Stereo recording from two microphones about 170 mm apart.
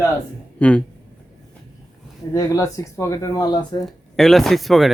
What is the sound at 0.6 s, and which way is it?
Speech, 10° left (ahead or behind).